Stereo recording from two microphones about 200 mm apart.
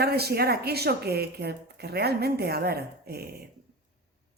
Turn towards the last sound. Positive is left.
turn(degrees=-50)  # may be behind; listen again after turning